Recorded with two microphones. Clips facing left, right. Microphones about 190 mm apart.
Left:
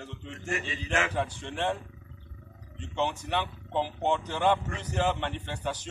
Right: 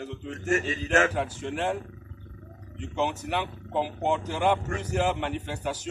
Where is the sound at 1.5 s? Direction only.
5° right (ahead or behind).